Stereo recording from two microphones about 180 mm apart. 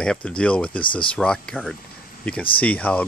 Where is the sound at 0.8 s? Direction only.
25° left (ahead or behind).